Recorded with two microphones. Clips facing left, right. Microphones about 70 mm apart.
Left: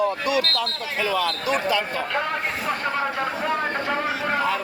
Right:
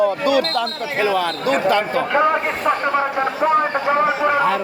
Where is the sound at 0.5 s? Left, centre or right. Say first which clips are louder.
Right 6 dB; right.